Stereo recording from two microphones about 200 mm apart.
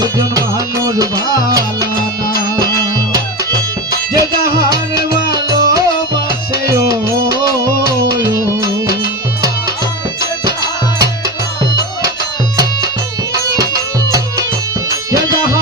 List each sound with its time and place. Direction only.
0.0 s music: 20° right (ahead or behind)
13.6 s music: 20° right (ahead or behind)